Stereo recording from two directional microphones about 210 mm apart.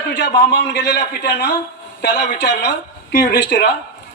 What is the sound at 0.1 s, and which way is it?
A man's voice, 55° left (ahead or behind).